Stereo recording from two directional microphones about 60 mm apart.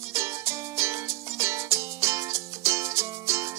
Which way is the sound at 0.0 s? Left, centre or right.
Right.